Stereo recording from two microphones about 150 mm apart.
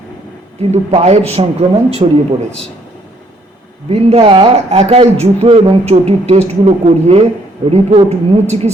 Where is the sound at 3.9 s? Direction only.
40° right (ahead or behind).